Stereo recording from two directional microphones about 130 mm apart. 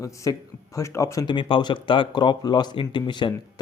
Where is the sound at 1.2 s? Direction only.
40° left (ahead or behind).